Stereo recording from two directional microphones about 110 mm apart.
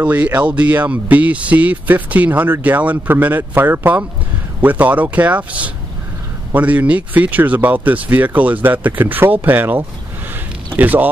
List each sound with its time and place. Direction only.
0.0 s speech: 15° right (ahead or behind)